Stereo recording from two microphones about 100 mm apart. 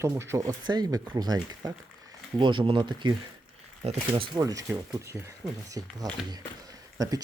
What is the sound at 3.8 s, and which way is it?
Speech, 90° right.